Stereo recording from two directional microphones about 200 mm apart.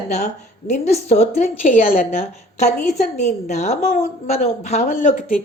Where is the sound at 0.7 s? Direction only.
35° left (ahead or behind).